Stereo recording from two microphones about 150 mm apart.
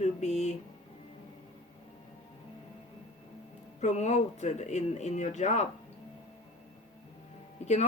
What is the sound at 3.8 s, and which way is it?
Speech, 50° left (ahead or behind).